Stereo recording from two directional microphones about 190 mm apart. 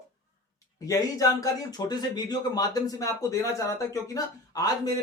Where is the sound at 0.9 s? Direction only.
20° left (ahead or behind).